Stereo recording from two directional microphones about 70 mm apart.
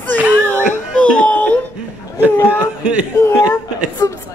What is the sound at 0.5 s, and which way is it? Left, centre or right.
Whimper, left.